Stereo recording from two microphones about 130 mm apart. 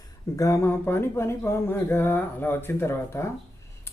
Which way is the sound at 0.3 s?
25° left (ahead or behind).